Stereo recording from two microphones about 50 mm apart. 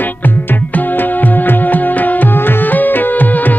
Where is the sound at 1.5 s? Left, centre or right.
Left.